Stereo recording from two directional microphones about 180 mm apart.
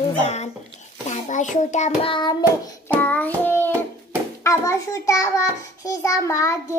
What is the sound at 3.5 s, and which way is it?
Hands, 10° left (ahead or behind).